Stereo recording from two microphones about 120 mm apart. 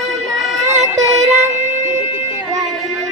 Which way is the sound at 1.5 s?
85° right.